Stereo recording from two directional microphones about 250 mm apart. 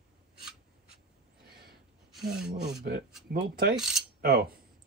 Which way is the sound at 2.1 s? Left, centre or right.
Centre.